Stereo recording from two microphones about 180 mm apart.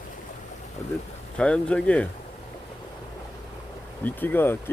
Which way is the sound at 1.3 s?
5° left (ahead or behind).